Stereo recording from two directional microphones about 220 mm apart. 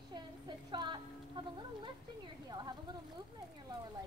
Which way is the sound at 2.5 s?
20° right (ahead or behind).